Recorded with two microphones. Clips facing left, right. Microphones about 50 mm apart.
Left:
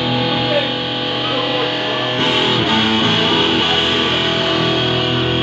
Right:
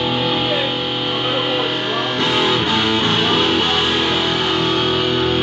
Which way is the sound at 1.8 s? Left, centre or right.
Left.